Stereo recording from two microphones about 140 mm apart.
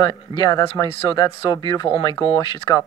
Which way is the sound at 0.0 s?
30° left (ahead or behind).